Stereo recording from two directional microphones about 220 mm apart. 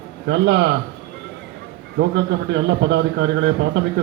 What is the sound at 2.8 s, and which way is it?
Speech, 55° right (ahead or behind).